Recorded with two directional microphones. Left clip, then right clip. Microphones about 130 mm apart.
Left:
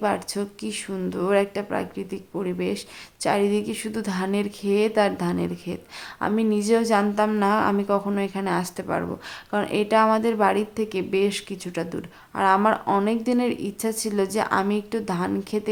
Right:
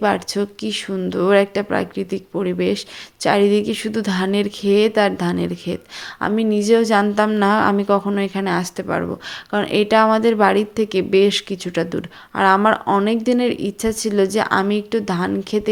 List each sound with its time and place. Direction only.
0.0 s speech: 25° right (ahead or behind)